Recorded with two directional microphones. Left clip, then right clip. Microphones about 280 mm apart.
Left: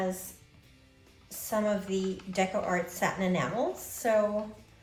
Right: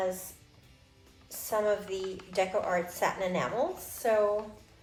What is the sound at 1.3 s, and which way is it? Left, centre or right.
A woman's voice, right.